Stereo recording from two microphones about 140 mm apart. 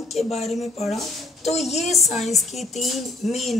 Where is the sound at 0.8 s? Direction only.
Centre (ahead or behind).